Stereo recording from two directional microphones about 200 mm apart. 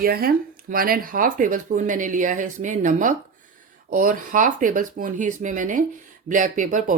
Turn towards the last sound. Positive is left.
turn(degrees=-40)  # may be behind; listen again after turning